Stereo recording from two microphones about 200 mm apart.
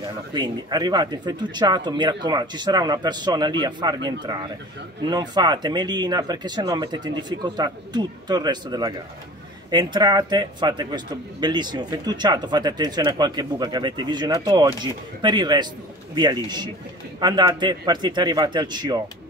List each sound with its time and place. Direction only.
0.3 s speech: 20° right (ahead or behind)